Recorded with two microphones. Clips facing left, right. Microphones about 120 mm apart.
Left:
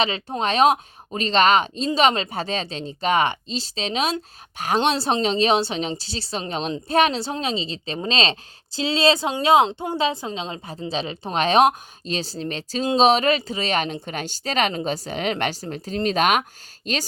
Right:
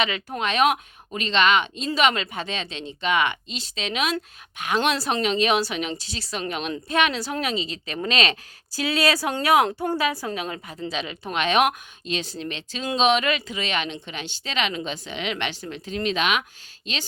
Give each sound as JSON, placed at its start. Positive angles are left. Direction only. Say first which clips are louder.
{"t": 0.0, "sound": "speech", "louder": "left 3 dB", "side_deg": 30}